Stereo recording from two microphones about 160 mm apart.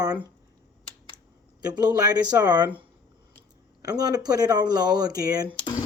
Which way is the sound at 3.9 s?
25° right (ahead or behind).